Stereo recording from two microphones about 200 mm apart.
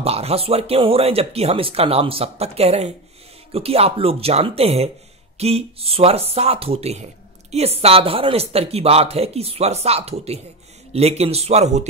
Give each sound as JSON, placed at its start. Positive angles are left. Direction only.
{"t": 0.0, "sound": "speech", "side_deg": -30}